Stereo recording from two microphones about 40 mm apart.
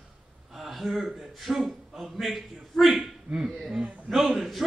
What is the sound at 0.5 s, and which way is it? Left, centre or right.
A man's voice, centre.